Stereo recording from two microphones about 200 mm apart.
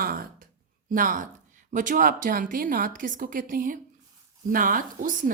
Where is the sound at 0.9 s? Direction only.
40° right (ahead or behind).